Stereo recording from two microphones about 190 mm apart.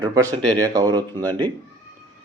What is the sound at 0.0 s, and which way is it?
Speech, 20° right (ahead or behind).